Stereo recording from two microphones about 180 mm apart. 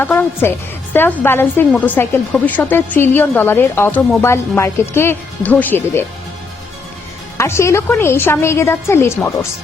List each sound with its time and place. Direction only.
0.0 s a woman's voice: 10° left (ahead or behind)
7.3 s a woman's voice: 15° left (ahead or behind)